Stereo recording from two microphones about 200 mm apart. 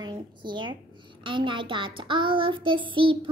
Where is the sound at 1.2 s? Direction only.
25° right (ahead or behind).